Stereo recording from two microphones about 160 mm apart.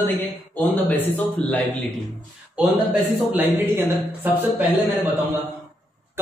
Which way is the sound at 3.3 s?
15° right (ahead or behind).